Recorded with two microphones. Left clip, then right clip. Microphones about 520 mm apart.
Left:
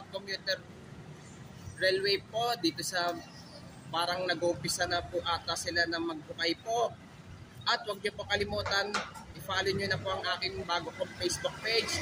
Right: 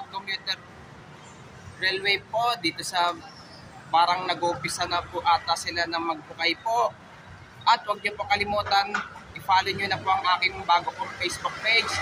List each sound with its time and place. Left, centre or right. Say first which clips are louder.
1.8 s a man's voice: right 4 dB; left